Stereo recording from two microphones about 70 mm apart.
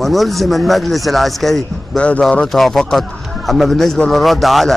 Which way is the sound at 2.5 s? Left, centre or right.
Centre.